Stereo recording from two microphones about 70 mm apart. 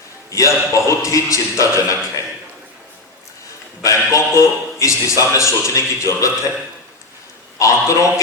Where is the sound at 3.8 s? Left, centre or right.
Left.